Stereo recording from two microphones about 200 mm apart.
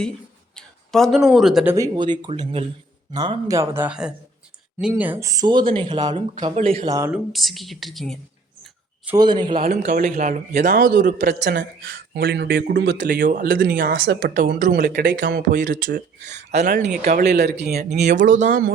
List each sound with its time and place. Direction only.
0.5 s speech: centre (ahead or behind)
1.7 s speech: 20° right (ahead or behind)
6.1 s speech: 35° right (ahead or behind)
6.8 s speech: 15° right (ahead or behind)
7.1 s a woman's voice: centre (ahead or behind)
9.1 s speech: 20° right (ahead or behind)
9.6 s a man's voice: 40° right (ahead or behind); by 13.1 s 60° right (ahead or behind)
13.1 s a man's voice: 45° right (ahead or behind)
17.2 s speech: 55° right (ahead or behind)
18.1 s speech: 40° right (ahead or behind)